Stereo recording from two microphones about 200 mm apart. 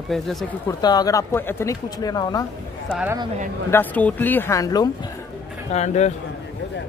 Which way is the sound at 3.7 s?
10° left (ahead or behind).